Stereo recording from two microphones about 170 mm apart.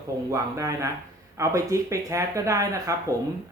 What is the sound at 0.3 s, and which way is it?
Speech, 20° right (ahead or behind).